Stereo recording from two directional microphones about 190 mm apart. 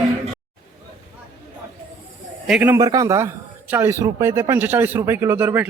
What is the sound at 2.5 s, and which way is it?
A man's voice, 10° right (ahead or behind).